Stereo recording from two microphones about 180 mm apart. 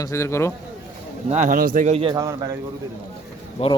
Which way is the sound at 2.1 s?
20° right (ahead or behind).